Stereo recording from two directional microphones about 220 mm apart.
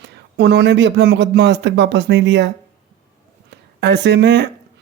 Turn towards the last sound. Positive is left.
turn(degrees=-50)  # may be behind; listen again after turning